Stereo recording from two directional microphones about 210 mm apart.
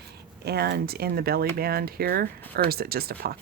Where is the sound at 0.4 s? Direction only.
50° right (ahead or behind).